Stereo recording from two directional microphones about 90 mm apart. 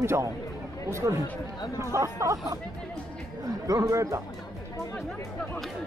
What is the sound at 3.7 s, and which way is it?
Speech, 40° right (ahead or behind).